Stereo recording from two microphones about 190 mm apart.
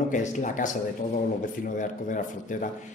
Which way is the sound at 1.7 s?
45° left (ahead or behind).